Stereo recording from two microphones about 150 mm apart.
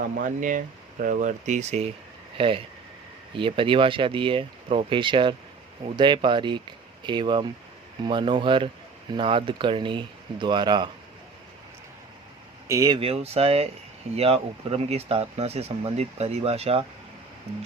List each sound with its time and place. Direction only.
0.0 s speech: 65° right (ahead or behind)
2.4 s speech: 35° right (ahead or behind)
12.6 s speech: 20° right (ahead or behind)
13.0 s speech: 40° right (ahead or behind)